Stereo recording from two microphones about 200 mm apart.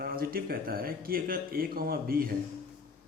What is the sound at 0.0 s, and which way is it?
Speech, 50° right (ahead or behind).